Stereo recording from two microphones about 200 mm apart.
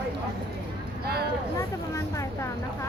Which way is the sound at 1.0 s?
50° right (ahead or behind).